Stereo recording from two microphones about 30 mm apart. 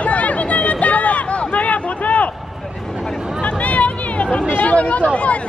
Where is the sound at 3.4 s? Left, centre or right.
Left.